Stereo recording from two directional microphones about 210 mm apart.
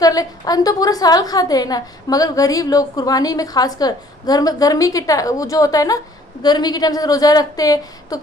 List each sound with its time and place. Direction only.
0.0 s a woman's voice: 15° left (ahead or behind)